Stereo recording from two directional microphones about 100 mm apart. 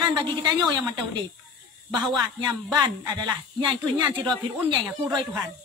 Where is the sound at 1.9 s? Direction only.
45° right (ahead or behind).